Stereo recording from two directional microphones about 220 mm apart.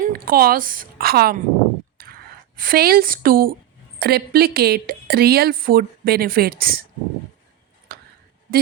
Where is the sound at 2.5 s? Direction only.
40° right (ahead or behind).